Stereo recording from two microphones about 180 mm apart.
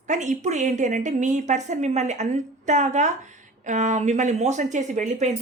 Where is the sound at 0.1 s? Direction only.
40° right (ahead or behind).